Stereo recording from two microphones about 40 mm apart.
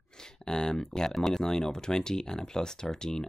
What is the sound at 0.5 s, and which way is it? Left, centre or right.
Speech, centre.